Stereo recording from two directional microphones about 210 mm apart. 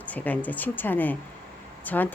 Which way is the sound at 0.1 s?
5° left (ahead or behind).